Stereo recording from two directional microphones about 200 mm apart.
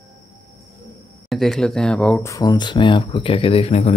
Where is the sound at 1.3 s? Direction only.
Centre (ahead or behind).